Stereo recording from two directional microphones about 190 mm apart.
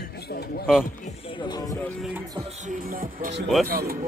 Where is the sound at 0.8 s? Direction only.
45° left (ahead or behind).